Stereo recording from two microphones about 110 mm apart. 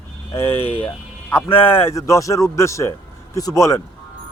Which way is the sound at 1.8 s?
25° left (ahead or behind).